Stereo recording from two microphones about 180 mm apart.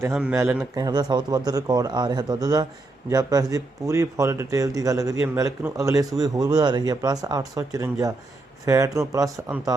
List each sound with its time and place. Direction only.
0.1 s a man's voice: 5° right (ahead or behind)